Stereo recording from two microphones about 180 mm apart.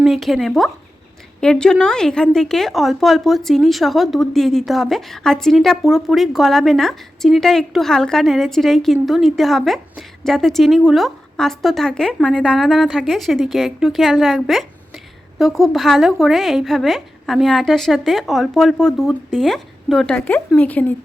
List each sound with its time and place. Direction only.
0.0 s a woman's voice: centre (ahead or behind)